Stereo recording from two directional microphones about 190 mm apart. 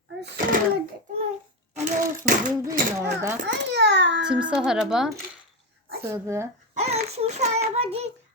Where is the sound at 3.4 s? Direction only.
65° right (ahead or behind).